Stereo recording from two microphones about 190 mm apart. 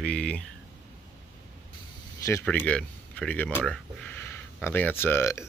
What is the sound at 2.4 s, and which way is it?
Speech, 5° left (ahead or behind).